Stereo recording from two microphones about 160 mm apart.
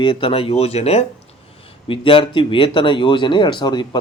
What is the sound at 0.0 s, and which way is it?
Speech, 30° left (ahead or behind).